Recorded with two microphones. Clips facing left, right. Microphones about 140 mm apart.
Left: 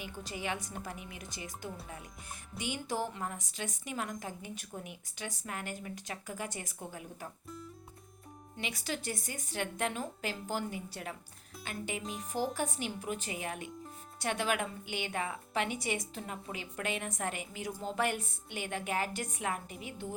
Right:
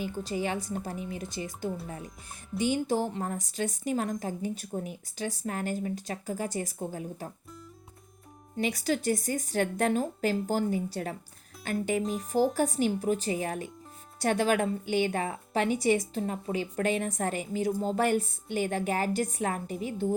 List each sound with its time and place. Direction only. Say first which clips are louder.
0.3 s a woman's voice: right 5 dB; 35° right (ahead or behind)
8.5 s a woman's voice: right 10 dB; 40° right (ahead or behind)